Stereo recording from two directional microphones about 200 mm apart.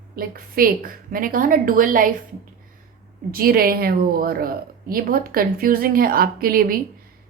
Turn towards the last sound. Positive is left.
turn(degrees=-45)  # may be behind; listen again after turning